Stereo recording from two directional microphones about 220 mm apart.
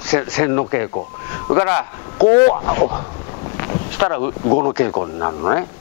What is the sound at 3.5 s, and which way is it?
Wind noise, 15° left (ahead or behind).